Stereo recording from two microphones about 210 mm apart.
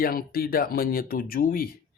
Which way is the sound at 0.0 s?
45° left (ahead or behind).